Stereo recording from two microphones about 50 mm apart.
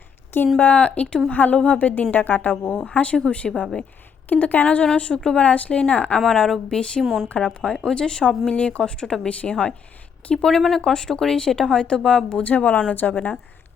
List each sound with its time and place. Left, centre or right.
0.6 s a woman's voice: left
2.6 s a woman's voice: left
6.1 s speech: centre
7.0 s speech: centre
7.3 s a woman's voice: left
10.3 s speech: centre; by 13.3 s left